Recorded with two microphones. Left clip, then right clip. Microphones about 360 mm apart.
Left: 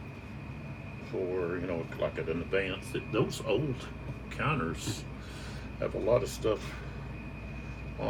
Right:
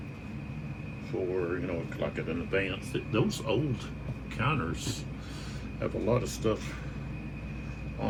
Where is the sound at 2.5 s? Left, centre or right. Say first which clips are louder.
Right 3 dB; centre.